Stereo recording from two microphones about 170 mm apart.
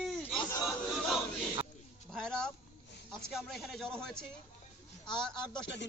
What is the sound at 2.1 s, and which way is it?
Speech, 5° left (ahead or behind).